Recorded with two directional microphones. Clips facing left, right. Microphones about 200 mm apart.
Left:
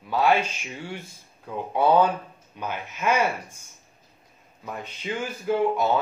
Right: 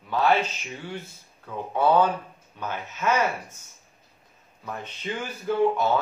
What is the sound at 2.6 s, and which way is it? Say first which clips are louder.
Speech: left 1 dB; 15° left (ahead or behind).